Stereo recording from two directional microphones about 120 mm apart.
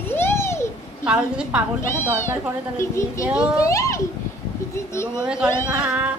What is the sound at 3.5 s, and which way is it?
Speech, 25° left (ahead or behind).